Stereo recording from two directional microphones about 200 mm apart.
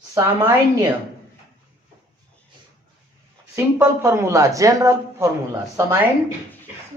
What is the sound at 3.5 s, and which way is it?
Speech, 15° right (ahead or behind).